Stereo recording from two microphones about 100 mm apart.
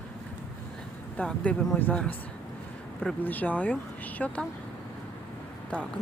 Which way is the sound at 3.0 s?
15° left (ahead or behind).